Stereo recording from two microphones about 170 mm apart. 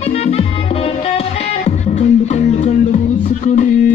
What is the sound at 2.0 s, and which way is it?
Music, 40° left (ahead or behind).